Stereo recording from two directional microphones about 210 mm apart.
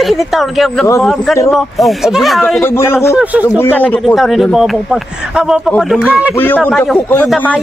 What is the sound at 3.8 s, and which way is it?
Speech, 5° left (ahead or behind).